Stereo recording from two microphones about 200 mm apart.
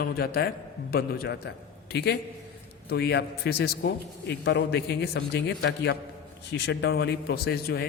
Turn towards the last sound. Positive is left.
turn(degrees=50)  # may be behind; listen again after turning